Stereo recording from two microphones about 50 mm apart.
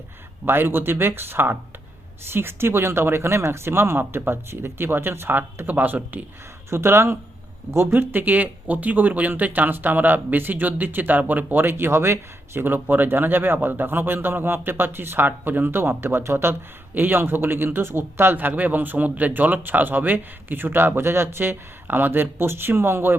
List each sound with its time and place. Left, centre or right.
0.4 s speech: right
6.7 s speech: right
8.1 s speech: right
11.5 s speech: right
16.9 s speech: right